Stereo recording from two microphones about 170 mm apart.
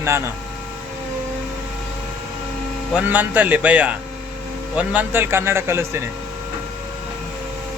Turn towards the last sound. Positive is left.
turn(degrees=-15)  # may be behind; listen again after turning